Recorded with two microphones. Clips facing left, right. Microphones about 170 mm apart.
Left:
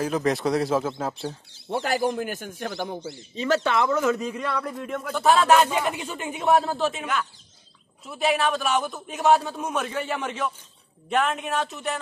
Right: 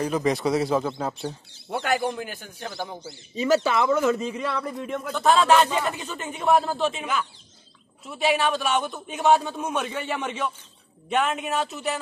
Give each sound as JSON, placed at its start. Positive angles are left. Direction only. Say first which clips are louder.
{"t": 0.0, "sound": "a man's voice", "louder": "even", "side_deg": 0}
{"t": 1.7, "sound": "a man's voice", "louder": "left 1 dB", "side_deg": 35}
{"t": 3.3, "sound": "a man's voice", "louder": "right 2 dB", "side_deg": -10}
{"t": 6.4, "sound": "a man's voice", "louder": "even", "side_deg": 0}